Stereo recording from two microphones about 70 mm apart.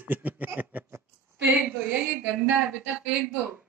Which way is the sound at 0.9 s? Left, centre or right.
Right.